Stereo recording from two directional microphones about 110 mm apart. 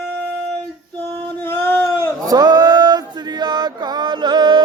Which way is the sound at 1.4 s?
20° left (ahead or behind).